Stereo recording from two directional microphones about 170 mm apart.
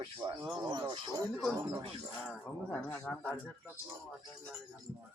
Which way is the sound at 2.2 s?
5° left (ahead or behind).